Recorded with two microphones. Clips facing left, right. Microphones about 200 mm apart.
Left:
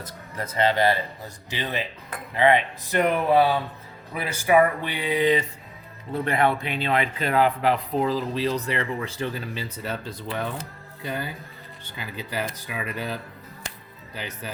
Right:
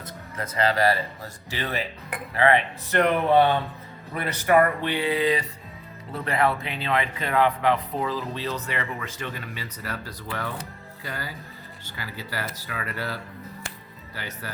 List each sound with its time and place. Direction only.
0.3 s speech: 25° left (ahead or behind)